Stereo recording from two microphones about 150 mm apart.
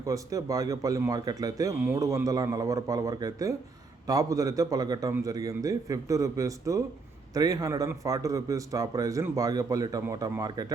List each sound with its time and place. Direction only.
0.0 s a man's voice: 20° right (ahead or behind)